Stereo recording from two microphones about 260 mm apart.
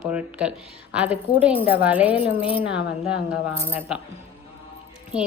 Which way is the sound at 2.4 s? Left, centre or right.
Left.